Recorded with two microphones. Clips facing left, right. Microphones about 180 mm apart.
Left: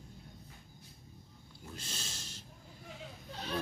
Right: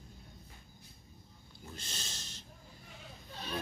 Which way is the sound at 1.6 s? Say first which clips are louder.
Left 1 dB; 5° left (ahead or behind).